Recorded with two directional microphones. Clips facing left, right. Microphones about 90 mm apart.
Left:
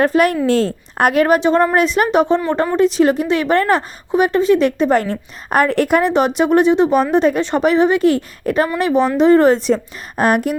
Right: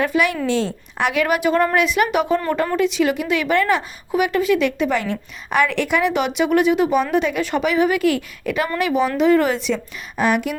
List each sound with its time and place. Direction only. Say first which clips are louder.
0.0 s a woman's voice: left 5 dB; 45° left (ahead or behind)